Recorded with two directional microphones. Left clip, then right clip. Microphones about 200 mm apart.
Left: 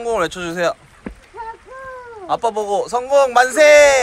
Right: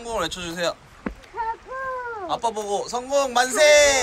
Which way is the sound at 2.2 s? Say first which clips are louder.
Left 8 dB; 5° right (ahead or behind).